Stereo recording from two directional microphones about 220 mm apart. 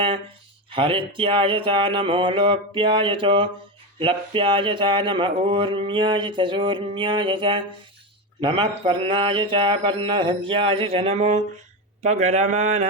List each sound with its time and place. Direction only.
0.7 s mantra: 25° right (ahead or behind)
12.0 s speech: 30° right (ahead or behind)